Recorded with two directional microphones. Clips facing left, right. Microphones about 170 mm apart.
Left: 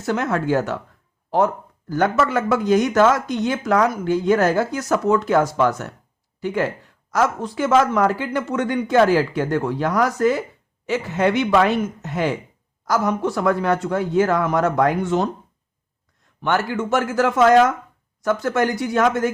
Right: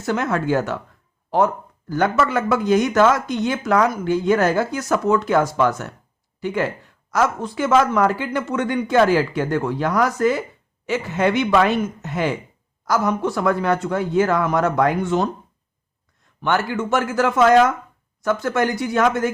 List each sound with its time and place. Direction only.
0.0 s speech: 35° left (ahead or behind)
1.9 s speech: 45° left (ahead or behind)
16.4 s speech: 40° left (ahead or behind)